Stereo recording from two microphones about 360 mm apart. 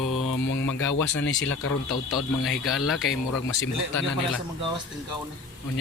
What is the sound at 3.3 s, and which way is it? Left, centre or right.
Speech, left.